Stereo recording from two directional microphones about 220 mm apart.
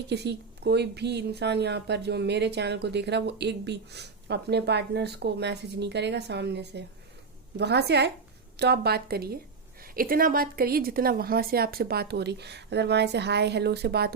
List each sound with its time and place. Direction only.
0.1 s speech: 50° right (ahead or behind)